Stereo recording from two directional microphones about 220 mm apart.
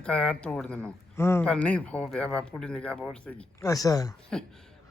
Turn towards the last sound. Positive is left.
turn(degrees=15)  # may be behind; listen again after turning